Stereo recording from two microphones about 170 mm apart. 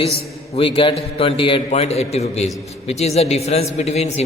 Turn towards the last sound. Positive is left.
turn(degrees=40)  # may be behind; listen again after turning